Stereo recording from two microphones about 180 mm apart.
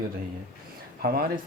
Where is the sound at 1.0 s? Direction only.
55° right (ahead or behind).